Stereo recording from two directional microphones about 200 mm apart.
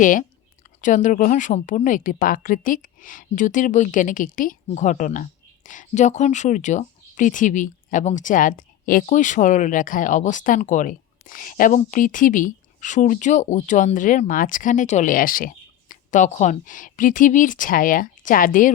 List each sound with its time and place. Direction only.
0.0 s a woman's voice: 40° left (ahead or behind)